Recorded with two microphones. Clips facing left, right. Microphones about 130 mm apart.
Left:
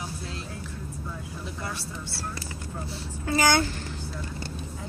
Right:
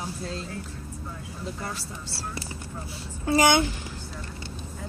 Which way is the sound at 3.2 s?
25° right (ahead or behind).